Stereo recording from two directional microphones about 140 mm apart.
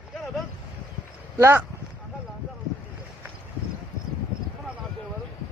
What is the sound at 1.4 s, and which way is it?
Speech, 15° right (ahead or behind).